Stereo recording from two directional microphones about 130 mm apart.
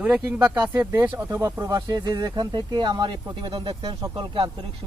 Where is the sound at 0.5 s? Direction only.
25° right (ahead or behind).